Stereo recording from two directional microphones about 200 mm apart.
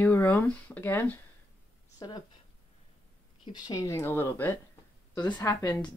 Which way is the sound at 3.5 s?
20° left (ahead or behind).